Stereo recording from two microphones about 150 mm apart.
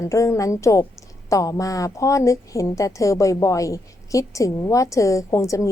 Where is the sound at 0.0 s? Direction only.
20° left (ahead or behind).